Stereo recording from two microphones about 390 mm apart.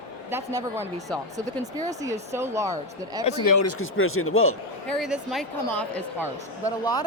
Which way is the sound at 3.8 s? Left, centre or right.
Left.